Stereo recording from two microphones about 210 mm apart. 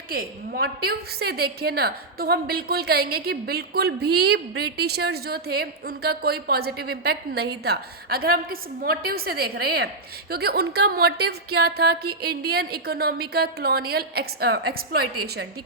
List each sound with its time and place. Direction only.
0.1 s a woman's voice: 45° right (ahead or behind)